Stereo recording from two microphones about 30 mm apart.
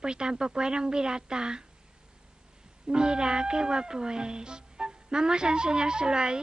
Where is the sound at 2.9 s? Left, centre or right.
Right.